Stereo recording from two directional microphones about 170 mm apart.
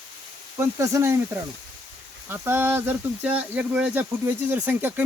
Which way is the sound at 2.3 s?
15° right (ahead or behind).